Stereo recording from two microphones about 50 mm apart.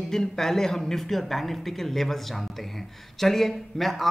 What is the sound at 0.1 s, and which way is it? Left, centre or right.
A man's voice, centre.